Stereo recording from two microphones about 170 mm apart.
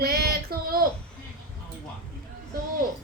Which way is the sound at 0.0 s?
65° right (ahead or behind).